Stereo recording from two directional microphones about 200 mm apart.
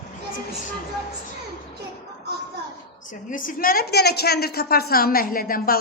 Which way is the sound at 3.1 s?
40° left (ahead or behind).